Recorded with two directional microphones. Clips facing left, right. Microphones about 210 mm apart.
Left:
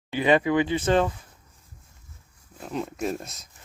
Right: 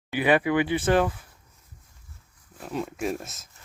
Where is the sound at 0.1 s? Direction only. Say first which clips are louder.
Left 1 dB; 10° right (ahead or behind).